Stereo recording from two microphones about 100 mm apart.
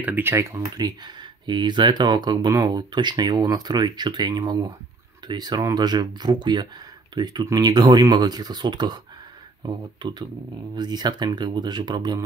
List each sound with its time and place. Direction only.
0.0 s speech: 20° right (ahead or behind); by 12.3 s 45° right (ahead or behind)